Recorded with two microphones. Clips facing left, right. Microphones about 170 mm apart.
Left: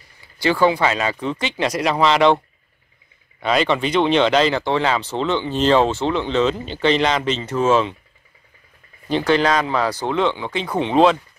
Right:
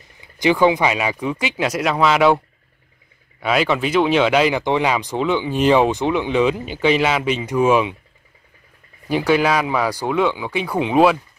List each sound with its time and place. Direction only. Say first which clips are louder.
0.2 s speech: right 2 dB; 15° right (ahead or behind)
9.1 s speech: even; 10° right (ahead or behind)